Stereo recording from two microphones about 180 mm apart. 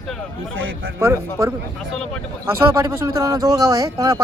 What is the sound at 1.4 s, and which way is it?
Speech, 15° right (ahead or behind).